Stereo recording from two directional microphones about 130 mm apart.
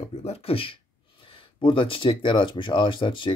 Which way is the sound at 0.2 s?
50° left (ahead or behind).